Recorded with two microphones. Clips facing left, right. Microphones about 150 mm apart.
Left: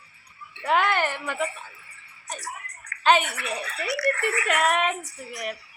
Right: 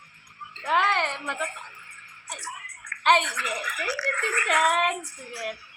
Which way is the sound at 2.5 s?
35° left (ahead or behind).